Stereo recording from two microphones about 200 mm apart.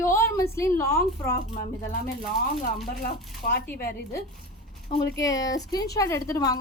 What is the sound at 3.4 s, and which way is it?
Speech, 50° left (ahead or behind).